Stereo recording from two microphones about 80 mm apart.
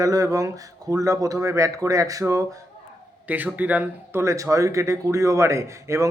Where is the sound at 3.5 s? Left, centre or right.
Centre.